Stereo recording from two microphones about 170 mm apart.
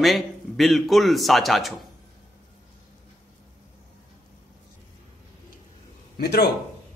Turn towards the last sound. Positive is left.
turn(degrees=70)  # may be behind; listen again after turning